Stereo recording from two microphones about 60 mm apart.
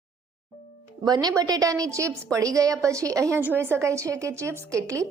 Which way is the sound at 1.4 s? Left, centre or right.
Right.